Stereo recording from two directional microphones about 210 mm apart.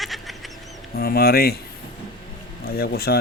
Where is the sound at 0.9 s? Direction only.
45° left (ahead or behind).